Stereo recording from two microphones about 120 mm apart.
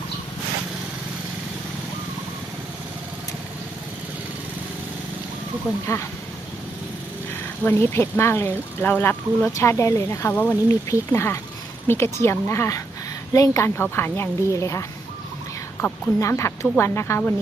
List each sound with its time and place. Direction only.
5.8 s a woman's voice: 25° left (ahead or behind)
7.6 s a woman's voice: 20° left (ahead or behind)